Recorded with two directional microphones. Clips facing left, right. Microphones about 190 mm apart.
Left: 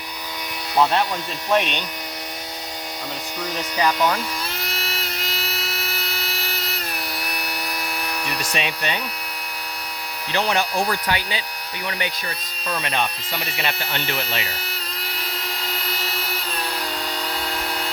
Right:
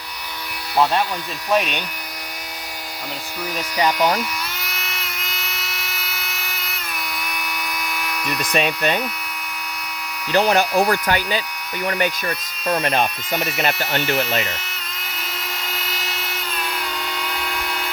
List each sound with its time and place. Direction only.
1.5 s speech: centre (ahead or behind)
3.8 s speech: 15° right (ahead or behind)
4.6 s a sound: 35° left (ahead or behind)
8.0 s a sound: 35° left (ahead or behind)
8.5 s speech: 50° right (ahead or behind)
10.3 s speech: 40° right (ahead or behind)
10.8 s speech: 60° right (ahead or behind)
17.2 s vehicle: 35° left (ahead or behind)